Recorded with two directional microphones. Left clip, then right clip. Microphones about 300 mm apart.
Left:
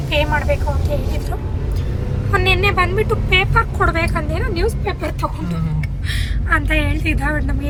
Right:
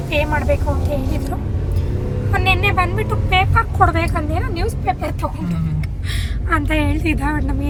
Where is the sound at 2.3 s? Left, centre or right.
Centre.